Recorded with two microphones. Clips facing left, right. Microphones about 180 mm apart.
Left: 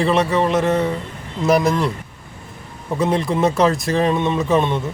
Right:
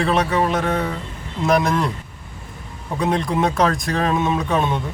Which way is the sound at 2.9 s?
Centre (ahead or behind).